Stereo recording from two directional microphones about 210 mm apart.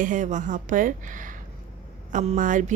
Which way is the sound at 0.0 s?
35° right (ahead or behind).